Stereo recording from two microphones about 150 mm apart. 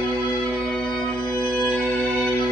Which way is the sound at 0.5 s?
5° left (ahead or behind).